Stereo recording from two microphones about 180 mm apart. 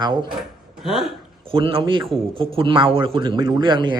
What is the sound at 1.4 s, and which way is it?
Speech, 30° right (ahead or behind).